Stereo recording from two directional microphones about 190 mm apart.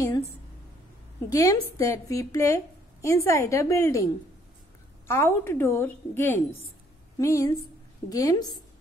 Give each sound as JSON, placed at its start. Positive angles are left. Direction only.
{"t": 1.3, "sound": "a woman's voice", "side_deg": 15}